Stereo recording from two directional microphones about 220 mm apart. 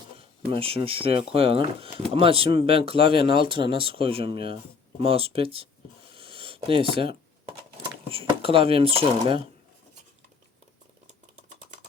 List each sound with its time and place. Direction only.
0.6 s speech: 25° right (ahead or behind)
6.1 s a sound: 25° right (ahead or behind)
8.1 s speech: 25° right (ahead or behind)